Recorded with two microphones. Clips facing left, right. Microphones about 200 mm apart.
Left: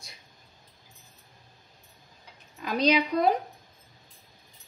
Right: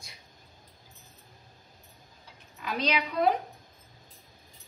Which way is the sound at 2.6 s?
40° left (ahead or behind).